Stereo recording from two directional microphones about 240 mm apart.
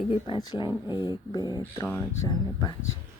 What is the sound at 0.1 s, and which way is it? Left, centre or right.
Speech, centre.